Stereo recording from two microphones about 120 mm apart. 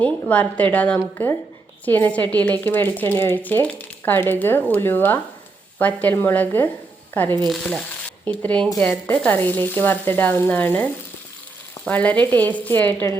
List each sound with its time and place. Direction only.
0.0 s speech: 10° left (ahead or behind)
7.3 s speech: 35° right (ahead or behind)
7.5 s sizzle: 10° left (ahead or behind)
8.8 s speech: 10° left (ahead or behind)
11.9 s speech: 10° left (ahead or behind)